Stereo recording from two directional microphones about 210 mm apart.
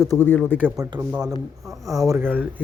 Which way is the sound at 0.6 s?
15° right (ahead or behind).